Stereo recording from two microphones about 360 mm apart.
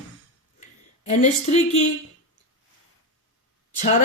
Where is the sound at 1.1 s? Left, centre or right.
Centre.